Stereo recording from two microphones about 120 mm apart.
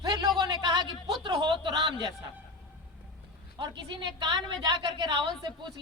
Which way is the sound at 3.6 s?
40° right (ahead or behind).